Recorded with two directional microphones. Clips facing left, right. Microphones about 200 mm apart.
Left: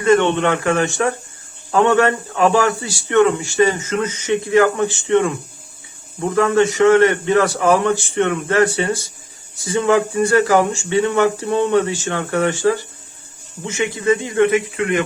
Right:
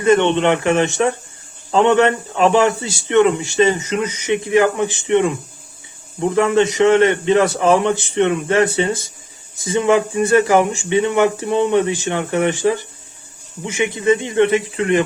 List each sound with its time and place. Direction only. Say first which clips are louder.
0.0 s a man's voice: right 1 dB; 20° right (ahead or behind)